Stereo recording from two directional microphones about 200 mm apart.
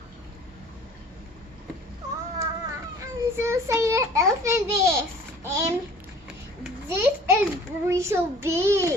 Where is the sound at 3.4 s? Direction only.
15° right (ahead or behind).